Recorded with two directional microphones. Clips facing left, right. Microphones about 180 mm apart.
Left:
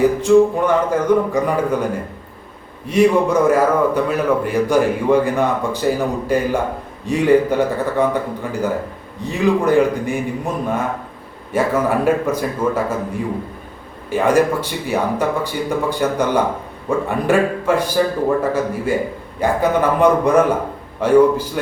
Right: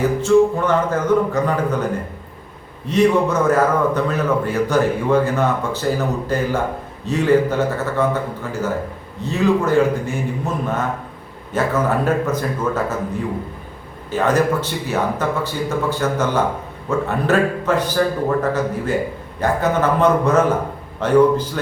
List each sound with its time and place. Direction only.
0.0 s a man's voice: 15° left (ahead or behind)
2.8 s a man's voice: 10° left (ahead or behind)
9.2 s a man's voice: 15° left (ahead or behind)
14.1 s a man's voice: 10° left (ahead or behind)